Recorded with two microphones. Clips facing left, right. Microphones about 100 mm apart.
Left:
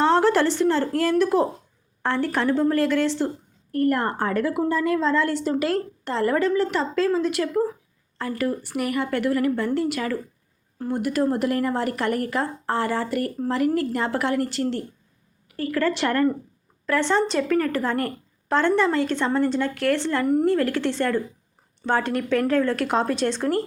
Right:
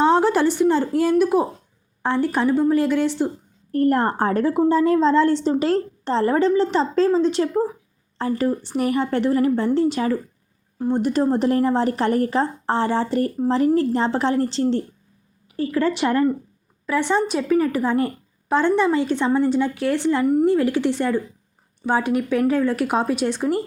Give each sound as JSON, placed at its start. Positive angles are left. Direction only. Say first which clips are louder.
{"t": 0.0, "sound": "a woman's voice", "louder": "right 2 dB", "side_deg": -15}
{"t": 3.7, "sound": "a woman's voice", "louder": "right 3 dB", "side_deg": -30}